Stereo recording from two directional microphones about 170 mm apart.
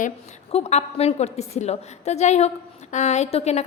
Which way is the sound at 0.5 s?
40° left (ahead or behind).